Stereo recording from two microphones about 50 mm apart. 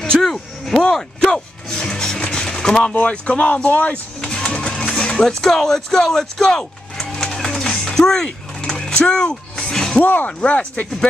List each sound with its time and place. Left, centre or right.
0.0 s a sound: centre
1.2 s music: centre
2.9 s speech: left
4.2 s printer: centre
4.9 s music: centre
5.2 s a sound: centre
10.0 s speech: left
10.4 s speech: left